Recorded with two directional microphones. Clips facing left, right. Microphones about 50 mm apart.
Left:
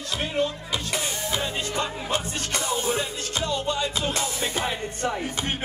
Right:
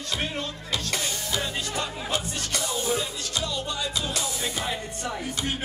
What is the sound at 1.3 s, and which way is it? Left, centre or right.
Speech, left.